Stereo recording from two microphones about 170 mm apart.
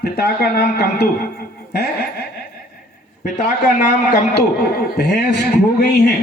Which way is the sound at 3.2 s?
50° left (ahead or behind).